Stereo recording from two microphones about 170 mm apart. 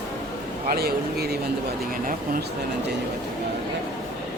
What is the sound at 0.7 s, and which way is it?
Speech, 65° right (ahead or behind).